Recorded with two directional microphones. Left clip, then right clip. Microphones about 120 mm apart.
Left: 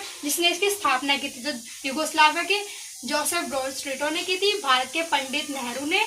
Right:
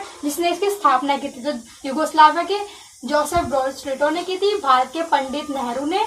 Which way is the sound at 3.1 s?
5° left (ahead or behind).